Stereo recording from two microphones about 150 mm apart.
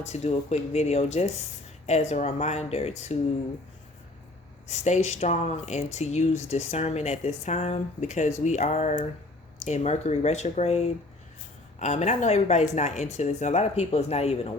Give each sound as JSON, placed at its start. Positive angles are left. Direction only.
{"t": 0.0, "sound": "speech", "side_deg": 45}
{"t": 4.7, "sound": "speech", "side_deg": 50}